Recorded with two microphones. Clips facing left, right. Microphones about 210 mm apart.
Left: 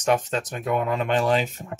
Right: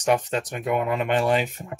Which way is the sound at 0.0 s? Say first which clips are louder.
Even; 15° right (ahead or behind).